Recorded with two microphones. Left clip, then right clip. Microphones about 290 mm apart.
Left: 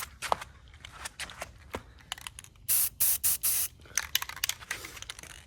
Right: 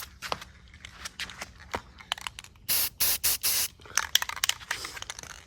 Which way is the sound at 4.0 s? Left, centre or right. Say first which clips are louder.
Right 6 dB; right.